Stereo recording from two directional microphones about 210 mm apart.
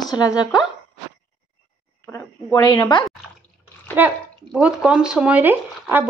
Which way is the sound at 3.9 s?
5° right (ahead or behind).